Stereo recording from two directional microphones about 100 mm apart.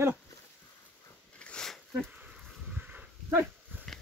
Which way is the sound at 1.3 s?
10° left (ahead or behind).